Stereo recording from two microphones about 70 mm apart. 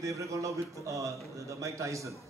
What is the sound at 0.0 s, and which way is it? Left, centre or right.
A woman's voice, right.